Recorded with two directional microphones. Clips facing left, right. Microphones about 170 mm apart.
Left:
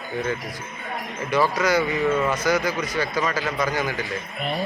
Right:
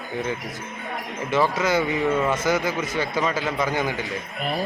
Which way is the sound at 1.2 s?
25° right (ahead or behind).